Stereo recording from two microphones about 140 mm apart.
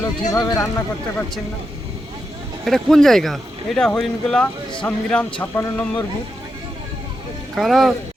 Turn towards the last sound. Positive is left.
turn(degrees=0)  # may be behind; listen again after turning